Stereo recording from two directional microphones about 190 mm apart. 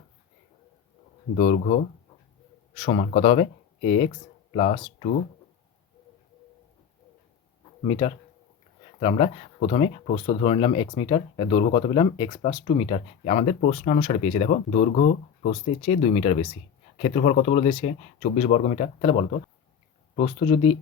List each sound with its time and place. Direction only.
1.4 s speech: 40° left (ahead or behind)
2.7 s speech: 30° left (ahead or behind)
7.9 s speech: 25° left (ahead or behind)